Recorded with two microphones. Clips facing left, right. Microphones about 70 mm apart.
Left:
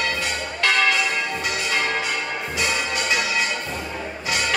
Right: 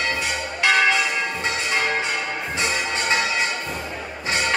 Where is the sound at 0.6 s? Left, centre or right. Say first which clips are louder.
Right 2 dB; centre.